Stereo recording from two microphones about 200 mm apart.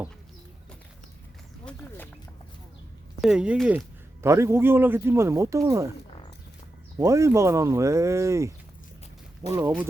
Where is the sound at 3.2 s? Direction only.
5° right (ahead or behind).